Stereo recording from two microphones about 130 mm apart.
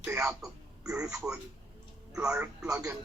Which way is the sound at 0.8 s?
10° right (ahead or behind).